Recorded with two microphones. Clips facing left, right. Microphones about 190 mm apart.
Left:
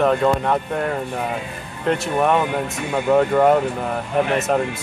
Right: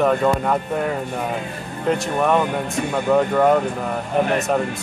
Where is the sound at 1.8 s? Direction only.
Centre (ahead or behind).